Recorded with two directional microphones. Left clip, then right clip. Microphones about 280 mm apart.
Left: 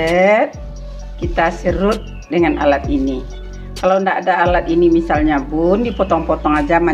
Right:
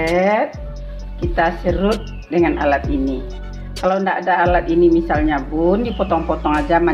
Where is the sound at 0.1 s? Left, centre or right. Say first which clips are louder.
Left 5 dB; centre.